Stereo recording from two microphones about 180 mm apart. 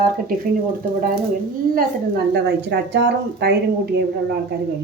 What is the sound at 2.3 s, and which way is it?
Speech, 65° right (ahead or behind).